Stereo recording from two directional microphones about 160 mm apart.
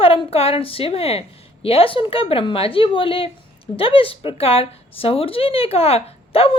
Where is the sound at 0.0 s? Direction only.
35° left (ahead or behind).